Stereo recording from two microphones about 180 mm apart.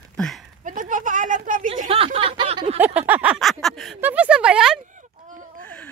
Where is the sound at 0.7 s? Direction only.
45° right (ahead or behind).